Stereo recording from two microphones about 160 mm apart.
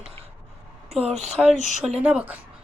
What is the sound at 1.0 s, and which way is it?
Speech, 40° right (ahead or behind).